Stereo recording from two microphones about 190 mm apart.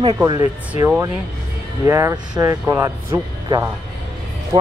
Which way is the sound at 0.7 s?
10° right (ahead or behind).